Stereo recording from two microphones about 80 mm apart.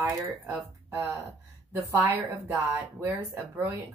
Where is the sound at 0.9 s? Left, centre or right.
Right.